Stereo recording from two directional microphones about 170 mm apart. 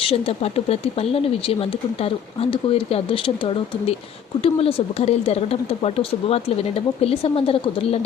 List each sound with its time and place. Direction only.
0.1 s speech: 35° left (ahead or behind)